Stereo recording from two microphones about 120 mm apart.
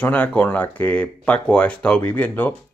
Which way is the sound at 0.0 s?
10° left (ahead or behind).